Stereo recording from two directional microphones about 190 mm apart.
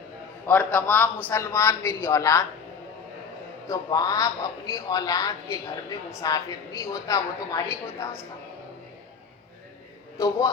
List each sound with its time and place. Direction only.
0.4 s speech: 10° left (ahead or behind)
3.7 s speech: 20° left (ahead or behind)
10.2 s a man's voice: 20° left (ahead or behind)